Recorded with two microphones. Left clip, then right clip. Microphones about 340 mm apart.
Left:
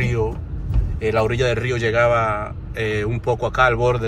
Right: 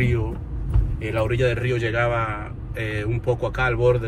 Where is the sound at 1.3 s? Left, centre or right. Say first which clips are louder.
Left 2 dB; centre.